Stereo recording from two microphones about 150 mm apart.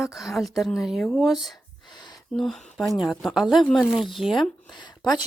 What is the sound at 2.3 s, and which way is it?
Speech, centre (ahead or behind).